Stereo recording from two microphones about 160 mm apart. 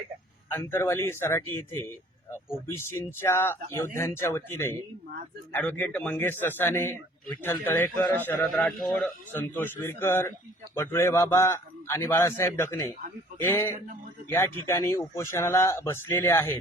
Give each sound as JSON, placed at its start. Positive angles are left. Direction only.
{"t": 0.5, "sound": "a man's voice", "side_deg": 15}
{"t": 9.7, "sound": "a man's voice", "side_deg": 15}